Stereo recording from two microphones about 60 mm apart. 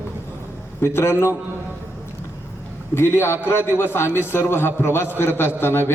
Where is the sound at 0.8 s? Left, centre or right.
Left.